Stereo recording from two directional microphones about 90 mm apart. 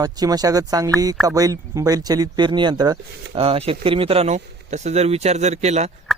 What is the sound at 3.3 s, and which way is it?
Speech, 90° right.